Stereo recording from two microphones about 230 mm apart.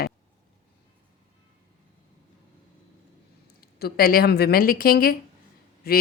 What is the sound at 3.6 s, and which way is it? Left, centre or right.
A woman's voice, left.